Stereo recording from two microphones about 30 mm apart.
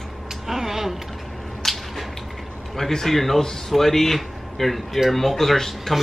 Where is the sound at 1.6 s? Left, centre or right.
Centre.